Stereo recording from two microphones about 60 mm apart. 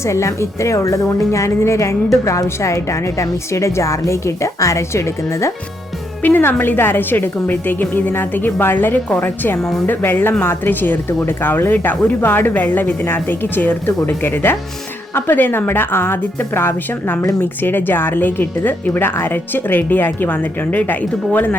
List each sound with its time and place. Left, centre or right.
0.0 s a woman's voice: left
6.2 s speech: left
9.6 s speech: centre
9.8 s speech: left